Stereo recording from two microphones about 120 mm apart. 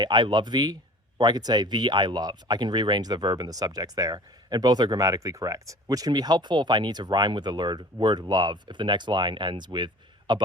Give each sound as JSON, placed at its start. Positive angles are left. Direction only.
{"t": 0.0, "sound": "speech", "side_deg": -40}